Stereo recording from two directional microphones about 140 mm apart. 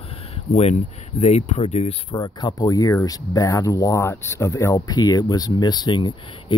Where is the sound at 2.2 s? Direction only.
30° left (ahead or behind).